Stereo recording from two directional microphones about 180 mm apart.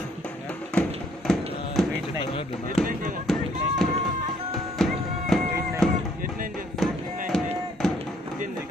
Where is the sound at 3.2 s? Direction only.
Centre (ahead or behind).